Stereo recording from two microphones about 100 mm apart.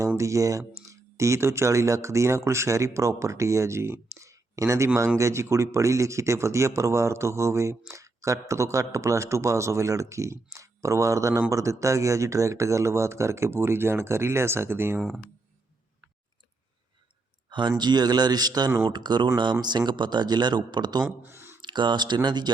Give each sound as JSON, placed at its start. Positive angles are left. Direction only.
{"t": 0.2, "sound": "speech", "side_deg": -30}
{"t": 17.5, "sound": "a man's voice", "side_deg": -50}
{"t": 21.2, "sound": "a sound", "side_deg": -25}
{"t": 21.6, "sound": "a man's voice", "side_deg": -50}